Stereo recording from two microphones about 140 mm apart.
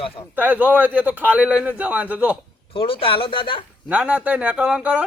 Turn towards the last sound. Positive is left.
turn(degrees=-10)  # may be behind; listen again after turning